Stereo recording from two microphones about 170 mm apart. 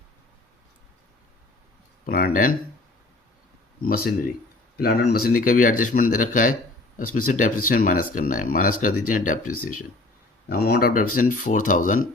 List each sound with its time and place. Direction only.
2.0 s speech: 60° left (ahead or behind)
3.8 s speech: 60° left (ahead or behind)
10.5 s speech: 65° left (ahead or behind)